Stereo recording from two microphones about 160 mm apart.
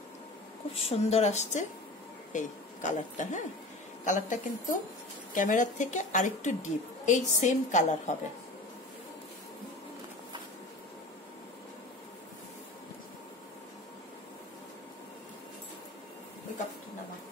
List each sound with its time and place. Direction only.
0.7 s a woman's voice: 40° left (ahead or behind)